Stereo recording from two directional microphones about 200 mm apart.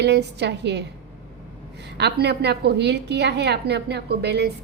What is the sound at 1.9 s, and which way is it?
A woman's voice, 55° right (ahead or behind).